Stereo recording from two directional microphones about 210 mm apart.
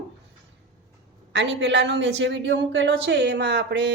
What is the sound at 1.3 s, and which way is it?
A woman's voice, 55° right (ahead or behind).